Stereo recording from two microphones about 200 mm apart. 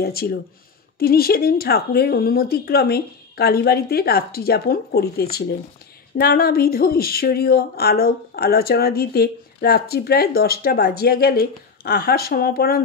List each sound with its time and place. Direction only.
0.0 s speech: 50° left (ahead or behind)